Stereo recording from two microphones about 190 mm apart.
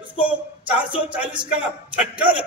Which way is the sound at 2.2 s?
25° right (ahead or behind).